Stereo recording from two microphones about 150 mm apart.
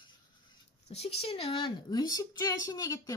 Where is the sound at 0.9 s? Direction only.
45° left (ahead or behind).